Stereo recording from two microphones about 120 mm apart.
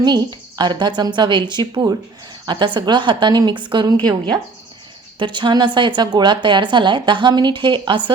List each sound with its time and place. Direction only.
0.0 s a woman's voice: 35° right (ahead or behind)
5.2 s a woman's voice: 40° right (ahead or behind)